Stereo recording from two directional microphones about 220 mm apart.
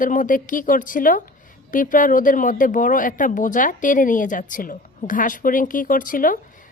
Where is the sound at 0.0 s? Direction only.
35° left (ahead or behind).